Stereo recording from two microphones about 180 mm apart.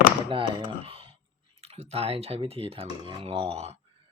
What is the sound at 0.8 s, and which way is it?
Clicking, 30° right (ahead or behind).